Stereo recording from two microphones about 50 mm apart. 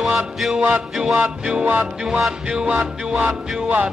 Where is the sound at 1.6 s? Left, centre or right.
Right.